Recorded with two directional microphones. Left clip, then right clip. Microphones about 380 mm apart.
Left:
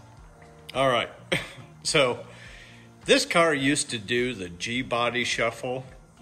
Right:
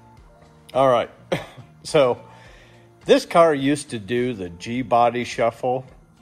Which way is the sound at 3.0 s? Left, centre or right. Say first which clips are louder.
Right 6 dB; centre.